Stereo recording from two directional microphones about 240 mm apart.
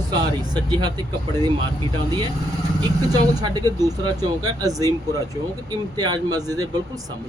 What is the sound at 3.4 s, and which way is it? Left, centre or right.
Speech, centre.